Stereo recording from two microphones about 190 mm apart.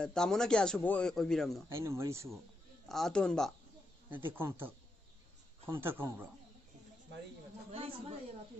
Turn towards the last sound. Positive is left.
turn(degrees=-30)  # may be behind; listen again after turning